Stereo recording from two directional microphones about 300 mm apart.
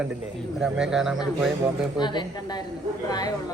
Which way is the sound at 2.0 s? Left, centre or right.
Centre.